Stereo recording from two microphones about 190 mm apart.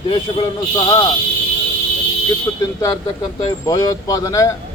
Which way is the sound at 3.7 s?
20° left (ahead or behind).